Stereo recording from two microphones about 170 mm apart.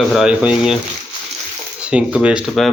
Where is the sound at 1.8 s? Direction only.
5° right (ahead or behind).